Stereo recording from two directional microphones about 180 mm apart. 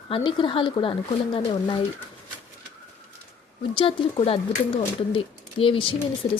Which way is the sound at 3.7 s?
30° left (ahead or behind).